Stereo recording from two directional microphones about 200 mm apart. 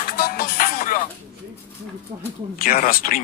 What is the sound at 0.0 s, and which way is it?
Music, 45° left (ahead or behind).